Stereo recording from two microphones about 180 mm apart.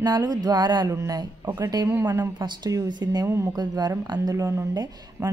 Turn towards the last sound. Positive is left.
turn(degrees=-20)  # may be behind; listen again after turning